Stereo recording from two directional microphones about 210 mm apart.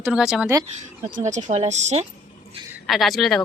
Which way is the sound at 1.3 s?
35° right (ahead or behind).